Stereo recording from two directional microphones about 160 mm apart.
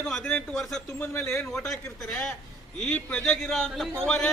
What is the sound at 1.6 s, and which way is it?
A man's voice, centre (ahead or behind).